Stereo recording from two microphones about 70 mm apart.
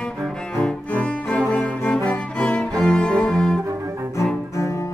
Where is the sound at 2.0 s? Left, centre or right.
Centre.